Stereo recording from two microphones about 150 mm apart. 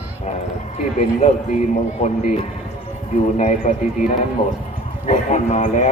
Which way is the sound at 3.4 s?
55° left (ahead or behind).